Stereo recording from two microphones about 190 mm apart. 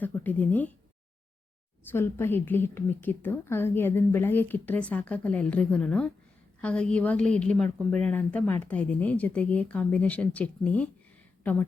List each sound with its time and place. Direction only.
0.0 s speech: 10° left (ahead or behind)
1.8 s speech: 10° left (ahead or behind)